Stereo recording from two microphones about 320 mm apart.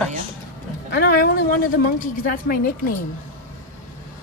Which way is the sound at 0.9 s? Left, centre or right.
Left.